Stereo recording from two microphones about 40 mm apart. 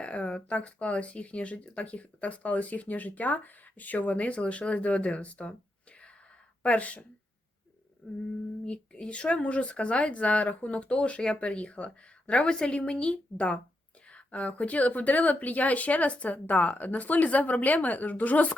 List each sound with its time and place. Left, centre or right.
0.0 s speech: left
6.6 s speech: left
8.0 s a sound: left
8.6 s speech: left